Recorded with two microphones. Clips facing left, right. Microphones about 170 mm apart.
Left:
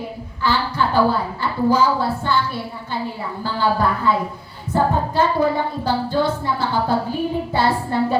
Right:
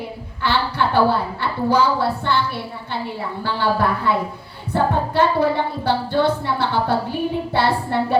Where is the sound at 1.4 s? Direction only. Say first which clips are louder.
Left 2 dB; 65° right (ahead or behind).